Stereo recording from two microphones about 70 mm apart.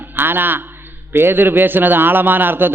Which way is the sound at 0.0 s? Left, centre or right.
Right.